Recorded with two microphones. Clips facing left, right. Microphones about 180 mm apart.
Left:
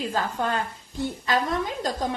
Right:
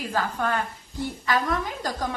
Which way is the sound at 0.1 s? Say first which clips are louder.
Even; 25° left (ahead or behind).